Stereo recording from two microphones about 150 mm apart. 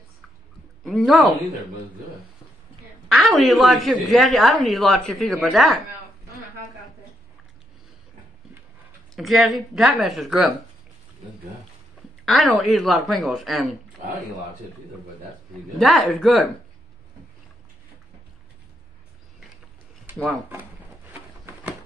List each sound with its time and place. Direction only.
0.8 s a woman's voice: centre (ahead or behind)
3.1 s speech: 5° left (ahead or behind)
9.1 s speech: centre (ahead or behind)
12.3 s speech: centre (ahead or behind)
15.8 s speech: centre (ahead or behind)